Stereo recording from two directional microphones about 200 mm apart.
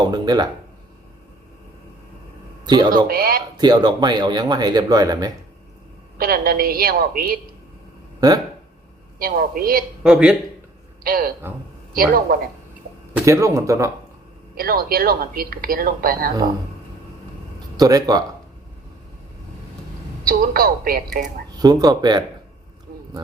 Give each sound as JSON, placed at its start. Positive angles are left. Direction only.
{"t": 0.0, "sound": "speech", "side_deg": -20}
{"t": 2.6, "sound": "speech", "side_deg": -20}
{"t": 3.1, "sound": "speech", "side_deg": -45}
{"t": 3.6, "sound": "speech", "side_deg": -20}
{"t": 6.1, "sound": "speech", "side_deg": -45}
{"t": 9.1, "sound": "speech", "side_deg": -45}
{"t": 10.0, "sound": "speech", "side_deg": -5}
{"t": 11.0, "sound": "speech", "side_deg": -45}
{"t": 12.3, "sound": "speech", "side_deg": -45}
{"t": 13.1, "sound": "speech", "side_deg": -15}
{"t": 14.5, "sound": "speech", "side_deg": -45}
{"t": 17.7, "sound": "speech", "side_deg": -20}
{"t": 20.2, "sound": "speech", "side_deg": -45}
{"t": 21.6, "sound": "speech", "side_deg": -20}